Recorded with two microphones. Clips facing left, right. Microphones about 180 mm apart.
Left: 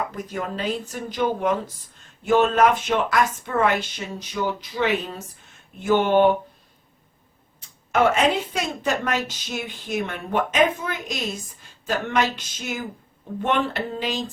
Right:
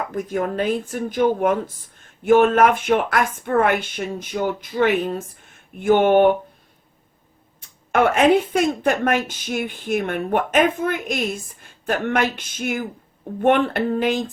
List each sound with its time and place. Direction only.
0.1 s a woman's voice: 50° right (ahead or behind)
5.8 s a sound: 55° right (ahead or behind)
7.6 s a woman's voice: 55° right (ahead or behind)